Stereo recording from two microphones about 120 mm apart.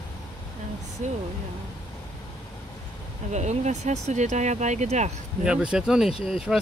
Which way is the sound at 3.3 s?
70° right (ahead or behind).